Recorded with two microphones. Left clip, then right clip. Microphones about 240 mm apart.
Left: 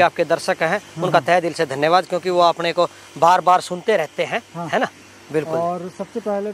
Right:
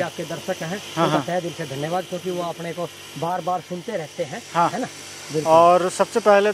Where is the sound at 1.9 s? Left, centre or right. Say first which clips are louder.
Left 8 dB; left.